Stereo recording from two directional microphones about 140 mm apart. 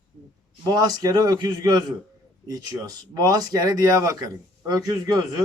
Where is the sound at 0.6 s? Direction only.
25° right (ahead or behind).